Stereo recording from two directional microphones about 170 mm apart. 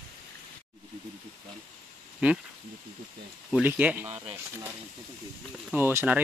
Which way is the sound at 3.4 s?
5° right (ahead or behind).